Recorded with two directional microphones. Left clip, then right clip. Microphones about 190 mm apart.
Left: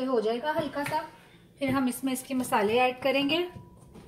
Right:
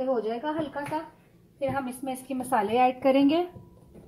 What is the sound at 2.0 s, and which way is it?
A woman's voice, 35° right (ahead or behind).